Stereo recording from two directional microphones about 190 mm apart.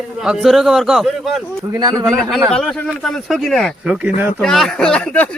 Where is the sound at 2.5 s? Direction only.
5° left (ahead or behind).